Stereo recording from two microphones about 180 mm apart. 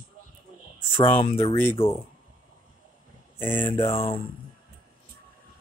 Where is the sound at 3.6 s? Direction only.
30° left (ahead or behind).